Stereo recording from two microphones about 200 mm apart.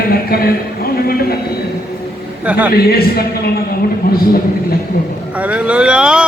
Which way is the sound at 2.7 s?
50° left (ahead or behind).